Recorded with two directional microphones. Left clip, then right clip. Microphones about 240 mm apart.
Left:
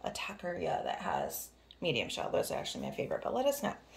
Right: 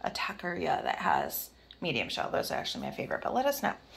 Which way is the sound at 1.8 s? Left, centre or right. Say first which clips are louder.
Right 2 dB; centre.